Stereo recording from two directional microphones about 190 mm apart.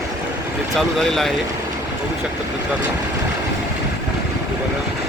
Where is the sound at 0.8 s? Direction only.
Centre (ahead or behind).